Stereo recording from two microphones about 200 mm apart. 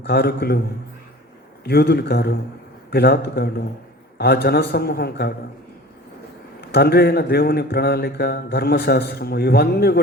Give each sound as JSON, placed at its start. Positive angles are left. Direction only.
{"t": 0.0, "sound": "speech", "side_deg": 55}
{"t": 1.6, "sound": "speech", "side_deg": 55}
{"t": 6.6, "sound": "speech", "side_deg": 55}